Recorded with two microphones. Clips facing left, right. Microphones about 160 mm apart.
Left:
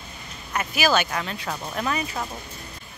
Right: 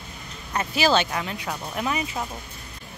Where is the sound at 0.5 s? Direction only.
30° right (ahead or behind).